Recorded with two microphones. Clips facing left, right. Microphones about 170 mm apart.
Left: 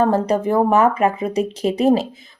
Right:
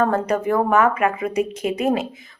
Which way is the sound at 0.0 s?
30° left (ahead or behind).